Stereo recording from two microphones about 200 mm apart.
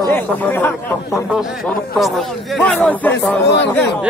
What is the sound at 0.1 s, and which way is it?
Speech, 10° left (ahead or behind).